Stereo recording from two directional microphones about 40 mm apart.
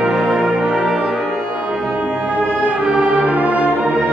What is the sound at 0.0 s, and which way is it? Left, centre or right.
Music, centre.